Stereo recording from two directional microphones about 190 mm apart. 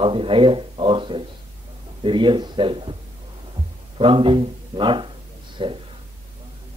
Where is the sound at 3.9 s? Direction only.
25° right (ahead or behind).